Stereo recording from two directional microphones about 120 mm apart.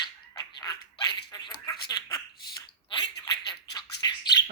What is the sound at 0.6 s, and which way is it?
Dog, 40° left (ahead or behind).